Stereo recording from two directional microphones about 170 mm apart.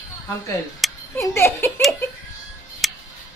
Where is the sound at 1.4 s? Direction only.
15° left (ahead or behind).